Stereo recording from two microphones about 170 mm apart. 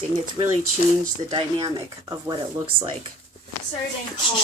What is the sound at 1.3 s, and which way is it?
Speech, 25° right (ahead or behind).